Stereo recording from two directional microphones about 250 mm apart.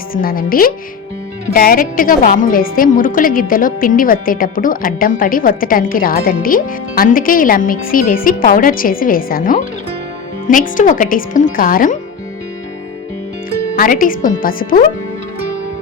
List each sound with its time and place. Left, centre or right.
0.1 s a woman's voice: left
13.7 s a woman's voice: left